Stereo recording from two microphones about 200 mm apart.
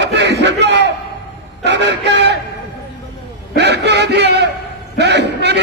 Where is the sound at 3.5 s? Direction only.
55° right (ahead or behind).